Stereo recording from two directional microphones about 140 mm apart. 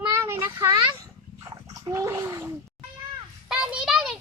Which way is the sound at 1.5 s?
25° right (ahead or behind).